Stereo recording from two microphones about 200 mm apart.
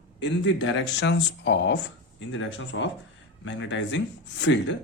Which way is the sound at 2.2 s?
70° left (ahead or behind).